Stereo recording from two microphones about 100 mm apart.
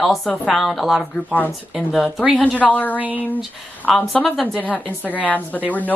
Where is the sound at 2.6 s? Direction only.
15° left (ahead or behind).